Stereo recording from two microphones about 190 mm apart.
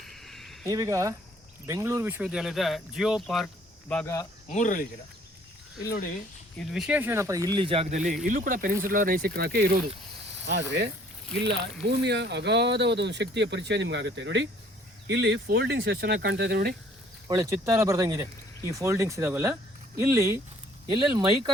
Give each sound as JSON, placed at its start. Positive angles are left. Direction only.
{"t": 0.0, "sound": "a sound", "side_deg": 0}
{"t": 0.6, "sound": "a man's voice", "side_deg": -15}
{"t": 4.4, "sound": "speech", "side_deg": 40}
{"t": 6.6, "sound": "speech", "side_deg": 0}
{"t": 10.4, "sound": "speech", "side_deg": -65}
{"t": 11.9, "sound": "speech", "side_deg": -60}
{"t": 17.2, "sound": "a man's voice", "side_deg": -15}